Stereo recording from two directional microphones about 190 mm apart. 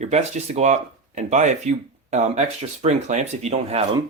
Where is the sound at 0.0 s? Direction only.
35° right (ahead or behind).